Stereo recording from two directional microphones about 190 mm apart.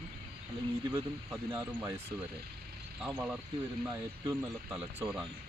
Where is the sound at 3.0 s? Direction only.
5° right (ahead or behind).